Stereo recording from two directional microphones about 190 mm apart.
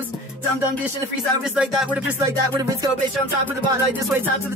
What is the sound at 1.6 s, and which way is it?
Music, 5° right (ahead or behind).